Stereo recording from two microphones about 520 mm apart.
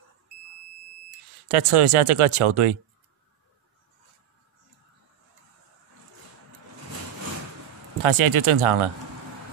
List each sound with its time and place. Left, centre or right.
1.5 s speech: right
8.0 s speech: right